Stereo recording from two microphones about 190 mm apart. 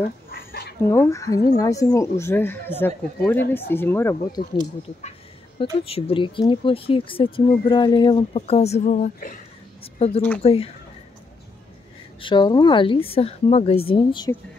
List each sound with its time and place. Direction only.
0.3 s a sound: 55° left (ahead or behind)
0.8 s speech: 15° left (ahead or behind)
5.6 s a woman's voice: 30° left (ahead or behind)
12.2 s a woman's voice: 25° left (ahead or behind)